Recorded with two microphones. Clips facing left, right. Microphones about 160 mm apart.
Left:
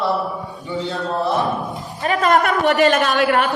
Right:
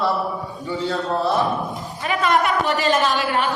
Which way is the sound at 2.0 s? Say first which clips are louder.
Left 3 dB; 45° left (ahead or behind).